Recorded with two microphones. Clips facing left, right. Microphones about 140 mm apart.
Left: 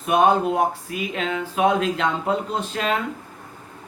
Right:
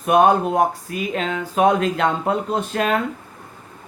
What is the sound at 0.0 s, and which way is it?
Speech, 50° right (ahead or behind).